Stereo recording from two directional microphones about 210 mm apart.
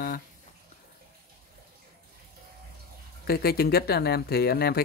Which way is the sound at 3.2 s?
45° left (ahead or behind).